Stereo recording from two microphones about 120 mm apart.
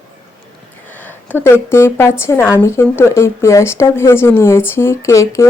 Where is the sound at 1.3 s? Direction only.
20° left (ahead or behind).